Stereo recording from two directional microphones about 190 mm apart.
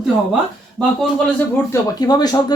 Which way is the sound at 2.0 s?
20° left (ahead or behind).